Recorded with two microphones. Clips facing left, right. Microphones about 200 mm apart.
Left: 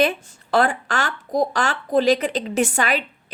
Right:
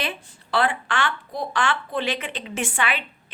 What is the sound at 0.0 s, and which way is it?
Speech, 45° left (ahead or behind).